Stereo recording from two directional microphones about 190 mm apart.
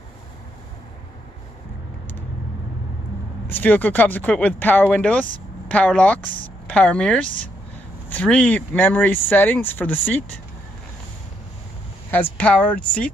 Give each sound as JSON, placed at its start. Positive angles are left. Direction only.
{"t": 3.4, "sound": "speech", "side_deg": 10}
{"t": 6.2, "sound": "speech", "side_deg": -40}
{"t": 6.7, "sound": "speech", "side_deg": 5}
{"t": 12.1, "sound": "speech", "side_deg": 10}